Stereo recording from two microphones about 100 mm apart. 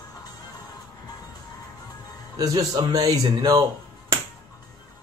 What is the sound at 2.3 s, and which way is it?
Speech, 40° right (ahead or behind).